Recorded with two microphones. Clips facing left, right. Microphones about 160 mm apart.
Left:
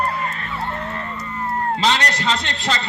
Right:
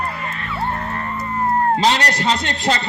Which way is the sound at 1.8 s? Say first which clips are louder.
Right 2 dB; 35° right (ahead or behind).